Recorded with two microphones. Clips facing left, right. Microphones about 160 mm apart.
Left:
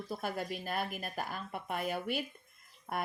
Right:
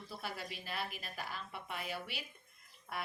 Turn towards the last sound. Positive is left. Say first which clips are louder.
# left 6 dB
turn(degrees=50)  # may be behind; listen again after turning